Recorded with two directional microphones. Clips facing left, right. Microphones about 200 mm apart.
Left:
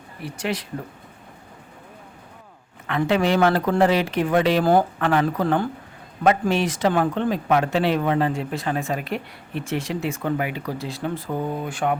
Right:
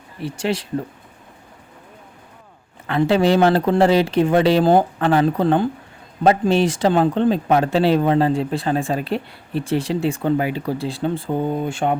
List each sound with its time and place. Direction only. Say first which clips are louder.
0.2 s speech: right 5 dB; 30° right (ahead or behind)
2.8 s speech: right 4 dB; 30° right (ahead or behind)